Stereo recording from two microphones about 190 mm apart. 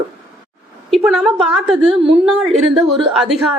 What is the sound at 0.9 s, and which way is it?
A woman's voice, centre (ahead or behind).